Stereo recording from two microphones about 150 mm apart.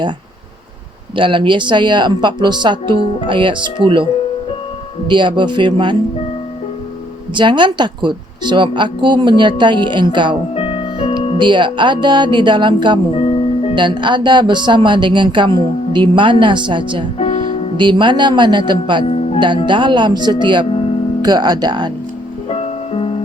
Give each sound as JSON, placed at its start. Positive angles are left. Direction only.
{"t": 1.1, "sound": "speech", "side_deg": -35}
{"t": 5.0, "sound": "speech", "side_deg": -30}
{"t": 7.3, "sound": "speech", "side_deg": -30}
{"t": 10.5, "sound": "music", "side_deg": 40}
{"t": 11.3, "sound": "speech", "side_deg": -30}
{"t": 13.1, "sound": "music", "side_deg": 40}
{"t": 13.7, "sound": "speech", "side_deg": -30}
{"t": 17.2, "sound": "music", "side_deg": 55}
{"t": 17.7, "sound": "speech", "side_deg": -30}
{"t": 22.4, "sound": "music", "side_deg": 40}